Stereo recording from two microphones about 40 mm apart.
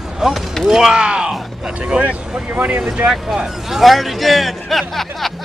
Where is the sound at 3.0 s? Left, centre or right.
Centre.